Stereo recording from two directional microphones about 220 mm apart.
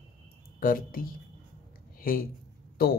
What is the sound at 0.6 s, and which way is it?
Speech, 40° left (ahead or behind).